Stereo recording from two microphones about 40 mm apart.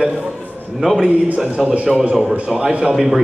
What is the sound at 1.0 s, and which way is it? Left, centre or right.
Speech, right.